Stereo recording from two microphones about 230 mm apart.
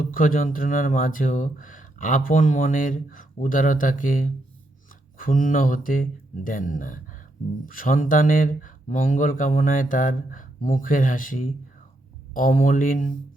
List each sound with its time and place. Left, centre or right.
0.0 s speech: left